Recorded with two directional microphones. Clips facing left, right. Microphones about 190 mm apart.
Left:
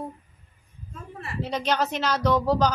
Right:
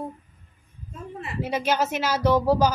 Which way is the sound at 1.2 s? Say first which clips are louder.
Right 2 dB; 10° right (ahead or behind).